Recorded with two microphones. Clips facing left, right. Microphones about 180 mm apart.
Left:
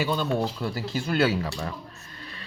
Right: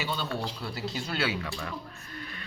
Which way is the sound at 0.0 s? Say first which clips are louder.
Left 7 dB; 45° left (ahead or behind).